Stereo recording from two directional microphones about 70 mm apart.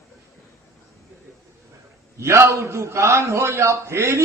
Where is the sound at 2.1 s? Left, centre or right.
Right.